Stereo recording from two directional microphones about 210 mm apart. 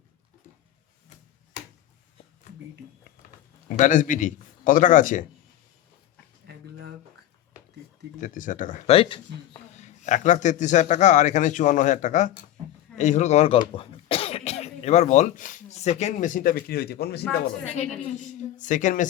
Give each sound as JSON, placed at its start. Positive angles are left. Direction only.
{"t": 3.7, "sound": "speech", "side_deg": 40}
{"t": 6.5, "sound": "a sound", "side_deg": -50}
{"t": 8.2, "sound": "speech", "side_deg": 40}
{"t": 18.5, "sound": "speech", "side_deg": 35}